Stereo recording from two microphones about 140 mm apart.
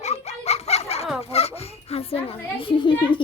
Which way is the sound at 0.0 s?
50° left (ahead or behind).